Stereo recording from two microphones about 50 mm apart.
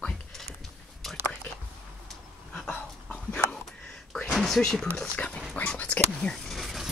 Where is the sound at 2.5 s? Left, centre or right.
Centre.